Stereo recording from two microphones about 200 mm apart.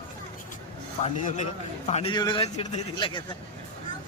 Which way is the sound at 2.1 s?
20° left (ahead or behind).